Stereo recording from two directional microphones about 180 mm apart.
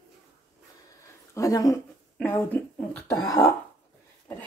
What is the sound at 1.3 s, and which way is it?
A woman's voice, 20° left (ahead or behind).